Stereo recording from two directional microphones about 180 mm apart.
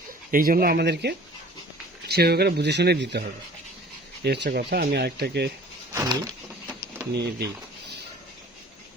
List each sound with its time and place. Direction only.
0.3 s speech: 50° right (ahead or behind)
5.9 s a sound: 20° right (ahead or behind)
7.1 s speech: 65° right (ahead or behind)